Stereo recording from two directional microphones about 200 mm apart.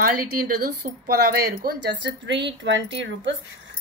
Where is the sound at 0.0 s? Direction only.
45° right (ahead or behind).